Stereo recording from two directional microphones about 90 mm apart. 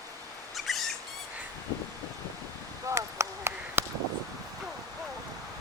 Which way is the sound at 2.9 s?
35° right (ahead or behind).